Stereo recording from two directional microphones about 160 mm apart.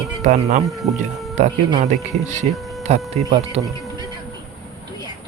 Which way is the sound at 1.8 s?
45° right (ahead or behind).